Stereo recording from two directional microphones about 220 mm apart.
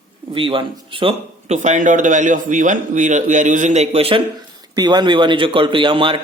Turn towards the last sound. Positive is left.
turn(degrees=-25)  # may be behind; listen again after turning